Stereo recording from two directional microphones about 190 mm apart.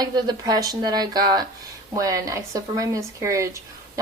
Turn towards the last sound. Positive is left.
turn(degrees=-15)  # may be behind; listen again after turning